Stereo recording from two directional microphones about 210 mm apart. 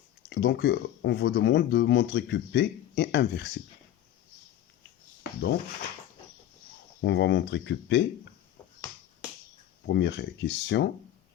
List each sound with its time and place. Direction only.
0.3 s speech: 50° left (ahead or behind)
7.0 s speech: 60° left (ahead or behind)
9.8 s speech: 55° left (ahead or behind)